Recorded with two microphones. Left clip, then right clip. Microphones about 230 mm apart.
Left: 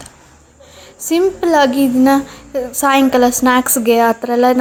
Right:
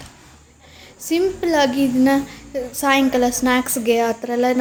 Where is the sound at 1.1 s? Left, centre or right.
Centre.